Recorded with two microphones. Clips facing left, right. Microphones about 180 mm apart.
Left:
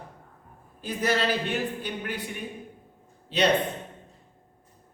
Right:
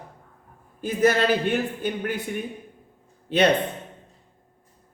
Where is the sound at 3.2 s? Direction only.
55° right (ahead or behind).